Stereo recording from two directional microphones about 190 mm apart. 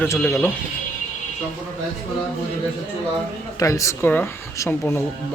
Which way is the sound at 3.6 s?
15° left (ahead or behind).